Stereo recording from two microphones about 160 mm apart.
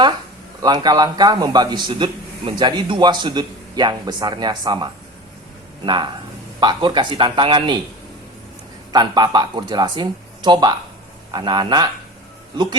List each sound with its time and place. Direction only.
0.6 s a man's voice: 25° right (ahead or behind)
8.9 s a man's voice: 25° right (ahead or behind)